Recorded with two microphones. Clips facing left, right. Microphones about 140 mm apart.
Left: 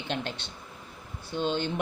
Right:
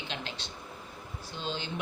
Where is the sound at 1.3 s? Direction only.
55° left (ahead or behind).